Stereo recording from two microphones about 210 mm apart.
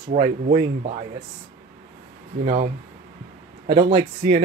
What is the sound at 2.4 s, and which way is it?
Speech, 35° right (ahead or behind).